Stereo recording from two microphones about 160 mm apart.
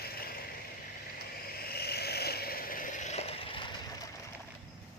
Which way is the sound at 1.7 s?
80° left.